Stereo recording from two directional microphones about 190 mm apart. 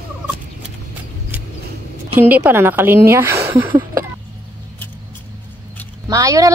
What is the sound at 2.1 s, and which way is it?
Speech, 10° right (ahead or behind).